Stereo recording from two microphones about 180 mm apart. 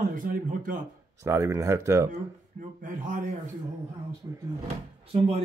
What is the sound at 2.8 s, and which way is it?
Speech, 45° right (ahead or behind).